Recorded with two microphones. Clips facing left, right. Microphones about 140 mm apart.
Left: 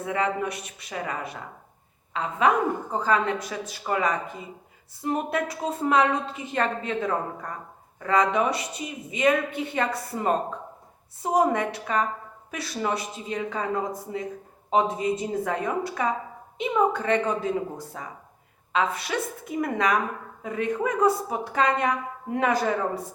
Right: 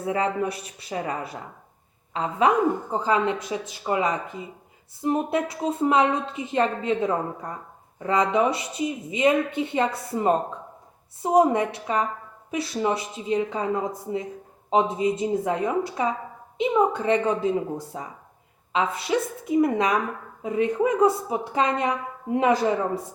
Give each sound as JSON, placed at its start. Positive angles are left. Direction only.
{"t": 0.0, "sound": "speech", "side_deg": -30}
{"t": 3.0, "sound": "a woman's voice", "side_deg": -20}